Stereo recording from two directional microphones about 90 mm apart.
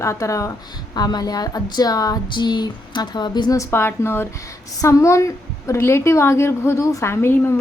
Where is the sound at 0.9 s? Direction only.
50° left (ahead or behind).